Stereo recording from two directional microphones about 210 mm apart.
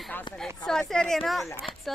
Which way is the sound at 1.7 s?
25° left (ahead or behind).